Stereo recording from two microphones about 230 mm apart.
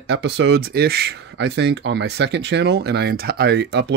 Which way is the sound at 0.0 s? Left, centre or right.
Right.